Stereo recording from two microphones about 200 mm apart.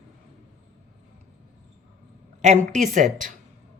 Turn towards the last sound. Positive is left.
turn(degrees=-40)  # may be behind; listen again after turning